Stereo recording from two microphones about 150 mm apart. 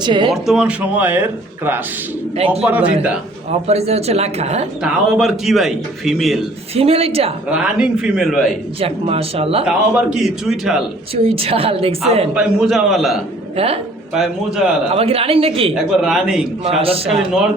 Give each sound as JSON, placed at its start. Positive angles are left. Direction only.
{"t": 0.0, "sound": "a woman's voice", "side_deg": -30}
{"t": 0.4, "sound": "speech", "side_deg": -5}
{"t": 3.7, "sound": "speech", "side_deg": -45}
{"t": 4.8, "sound": "a man's voice", "side_deg": -5}
{"t": 6.7, "sound": "a woman's voice", "side_deg": -40}
{"t": 7.5, "sound": "a man's voice", "side_deg": -5}
{"t": 8.8, "sound": "a woman's voice", "side_deg": -40}
{"t": 9.6, "sound": "a man's voice", "side_deg": -5}
{"t": 11.1, "sound": "a woman's voice", "side_deg": -40}
{"t": 12.3, "sound": "a man's voice", "side_deg": -5}
{"t": 14.9, "sound": "a woman's voice", "side_deg": -40}
{"t": 15.7, "sound": "a man's voice", "side_deg": -5}
{"t": 16.6, "sound": "a woman's voice", "side_deg": -40}
{"t": 17.1, "sound": "a man's voice", "side_deg": -5}